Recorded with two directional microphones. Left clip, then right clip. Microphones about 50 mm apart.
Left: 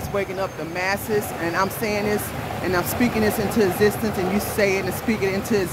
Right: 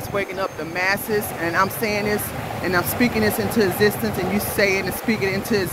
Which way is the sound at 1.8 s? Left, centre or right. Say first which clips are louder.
Right 1 dB; left.